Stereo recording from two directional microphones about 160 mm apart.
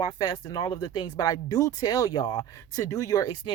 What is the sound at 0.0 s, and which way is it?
Speech, 25° left (ahead or behind).